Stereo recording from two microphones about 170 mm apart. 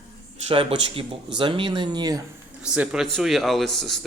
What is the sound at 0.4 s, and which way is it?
Speech, 35° right (ahead or behind).